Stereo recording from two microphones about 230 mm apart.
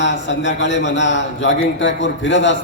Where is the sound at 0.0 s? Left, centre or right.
Left.